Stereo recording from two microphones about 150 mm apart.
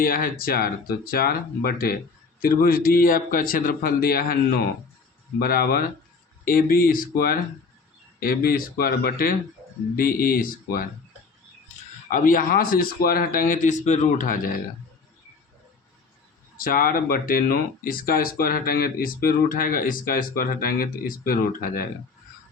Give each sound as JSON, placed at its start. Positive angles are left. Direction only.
{"t": 0.0, "sound": "speech", "side_deg": 70}
{"t": 6.4, "sound": "speech", "side_deg": 70}
{"t": 12.0, "sound": "speech", "side_deg": 65}
{"t": 16.6, "sound": "speech", "side_deg": 70}